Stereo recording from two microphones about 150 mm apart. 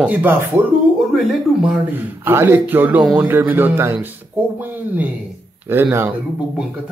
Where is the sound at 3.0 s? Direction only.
Centre (ahead or behind).